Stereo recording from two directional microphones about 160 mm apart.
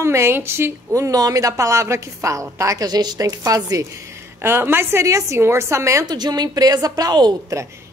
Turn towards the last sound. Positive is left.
turn(degrees=-25)  # may be behind; listen again after turning